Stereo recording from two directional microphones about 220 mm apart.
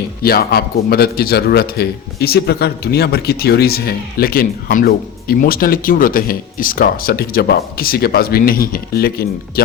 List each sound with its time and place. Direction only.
0.2 s a man's voice: 45° left (ahead or behind)